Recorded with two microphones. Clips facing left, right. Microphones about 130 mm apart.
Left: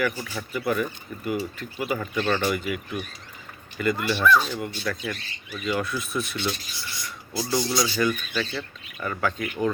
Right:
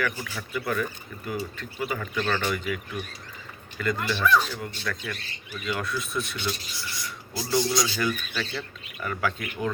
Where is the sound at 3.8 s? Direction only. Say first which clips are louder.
Left 3 dB; 5° left (ahead or behind).